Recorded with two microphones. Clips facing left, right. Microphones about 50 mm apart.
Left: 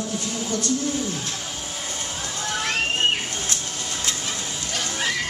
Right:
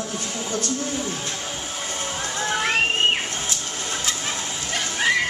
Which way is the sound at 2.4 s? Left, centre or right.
Right.